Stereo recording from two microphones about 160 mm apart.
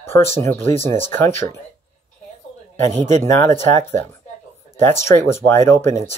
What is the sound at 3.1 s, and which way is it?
Speech, 15° left (ahead or behind).